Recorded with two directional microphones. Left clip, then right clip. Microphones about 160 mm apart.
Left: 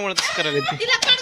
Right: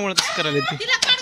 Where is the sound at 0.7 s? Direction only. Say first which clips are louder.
Left 2 dB; 45° left (ahead or behind).